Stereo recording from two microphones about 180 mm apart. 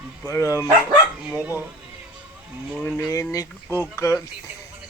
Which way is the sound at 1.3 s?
10° right (ahead or behind).